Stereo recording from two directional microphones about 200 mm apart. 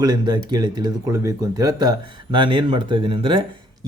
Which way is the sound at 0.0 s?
20° right (ahead or behind).